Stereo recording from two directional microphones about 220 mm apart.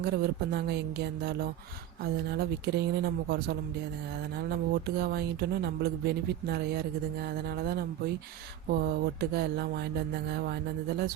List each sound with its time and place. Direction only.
0.0 s speech: 45° right (ahead or behind)